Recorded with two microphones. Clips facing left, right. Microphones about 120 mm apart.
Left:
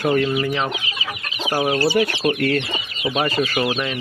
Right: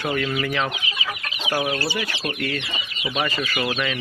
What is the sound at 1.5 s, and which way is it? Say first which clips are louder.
Speech: left 5 dB; 35° left (ahead or behind).